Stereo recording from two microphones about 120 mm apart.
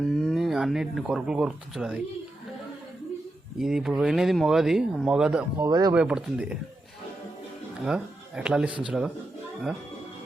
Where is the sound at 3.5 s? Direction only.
5° right (ahead or behind).